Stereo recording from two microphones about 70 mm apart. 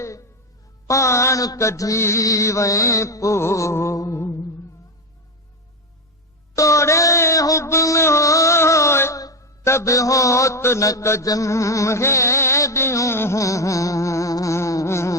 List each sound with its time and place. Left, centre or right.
0.0 s a sound: left
0.9 s mantra: left
6.6 s music: left
9.1 s mantra: left
11.3 s music: left
13.4 s music: left